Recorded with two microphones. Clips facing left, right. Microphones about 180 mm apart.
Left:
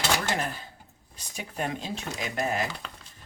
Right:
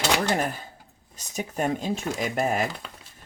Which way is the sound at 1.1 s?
45° right (ahead or behind).